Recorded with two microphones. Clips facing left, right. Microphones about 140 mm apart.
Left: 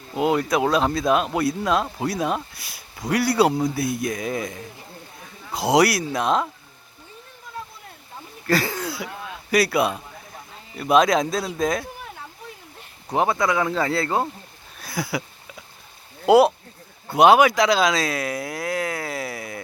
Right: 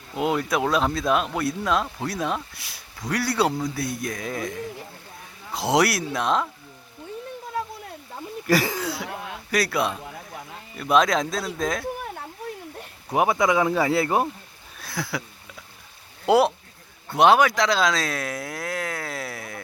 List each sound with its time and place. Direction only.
0.2 s speech: centre (ahead or behind)
8.4 s speech: 10° right (ahead or behind)
13.1 s speech: 10° right (ahead or behind)
14.8 s a sound: 5° left (ahead or behind)
16.2 s speech: 5° left (ahead or behind)